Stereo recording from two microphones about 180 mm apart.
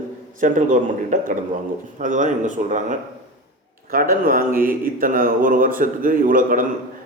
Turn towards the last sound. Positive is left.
turn(degrees=-50)  # may be behind; listen again after turning